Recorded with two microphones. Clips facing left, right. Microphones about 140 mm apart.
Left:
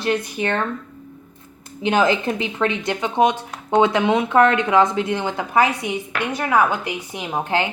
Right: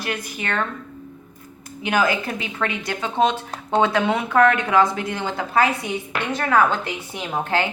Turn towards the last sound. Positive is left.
turn(degrees=15)  # may be behind; listen again after turning